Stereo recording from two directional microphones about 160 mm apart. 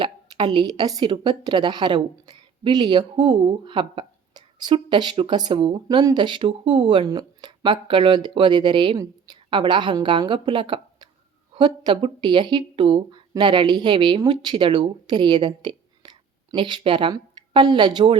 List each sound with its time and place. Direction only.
0.0 s a woman's voice: 30° right (ahead or behind)